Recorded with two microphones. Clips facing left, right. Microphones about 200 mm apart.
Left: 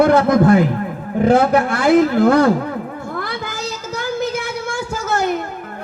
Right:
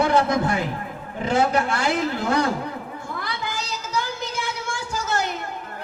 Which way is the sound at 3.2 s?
50° left (ahead or behind).